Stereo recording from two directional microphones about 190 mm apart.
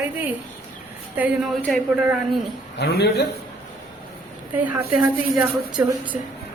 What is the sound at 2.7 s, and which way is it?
Speech, 60° left (ahead or behind).